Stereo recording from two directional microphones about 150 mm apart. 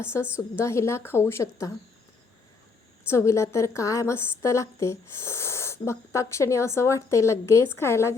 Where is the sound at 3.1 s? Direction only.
20° left (ahead or behind).